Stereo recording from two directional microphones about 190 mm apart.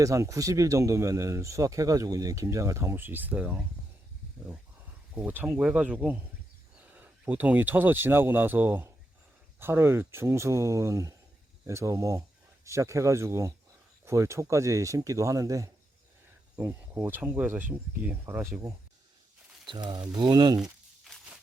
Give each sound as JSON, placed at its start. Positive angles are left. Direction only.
{"t": 0.0, "sound": "speech", "side_deg": -15}
{"t": 5.1, "sound": "speech", "side_deg": -10}
{"t": 19.6, "sound": "speech", "side_deg": -25}
{"t": 20.6, "sound": "crumpling", "side_deg": 0}